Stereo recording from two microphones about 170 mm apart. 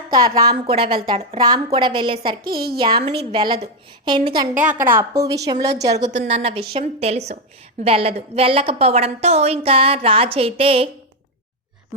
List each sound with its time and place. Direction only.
0.1 s a woman's voice: 20° right (ahead or behind)
0.7 s a woman's voice: 35° right (ahead or behind)
1.4 s a woman's voice: 25° right (ahead or behind)
2.4 s a woman's voice: 65° right (ahead or behind)
2.7 s a woman's voice: 30° right (ahead or behind)
4.6 s a woman's voice: 10° right (ahead or behind)
6.2 s a woman's voice: 35° right (ahead or behind)